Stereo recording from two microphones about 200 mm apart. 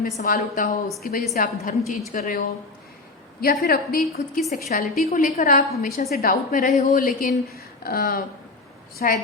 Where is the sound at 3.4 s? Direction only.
45° left (ahead or behind).